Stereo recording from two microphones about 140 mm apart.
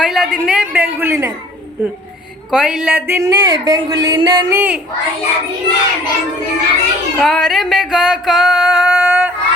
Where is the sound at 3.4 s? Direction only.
30° right (ahead or behind).